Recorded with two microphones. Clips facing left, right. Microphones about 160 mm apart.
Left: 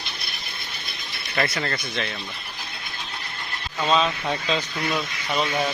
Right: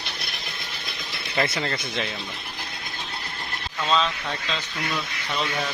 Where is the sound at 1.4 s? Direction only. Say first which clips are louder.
Even; 15° right (ahead or behind).